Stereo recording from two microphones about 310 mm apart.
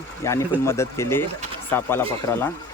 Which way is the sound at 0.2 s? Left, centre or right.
Centre.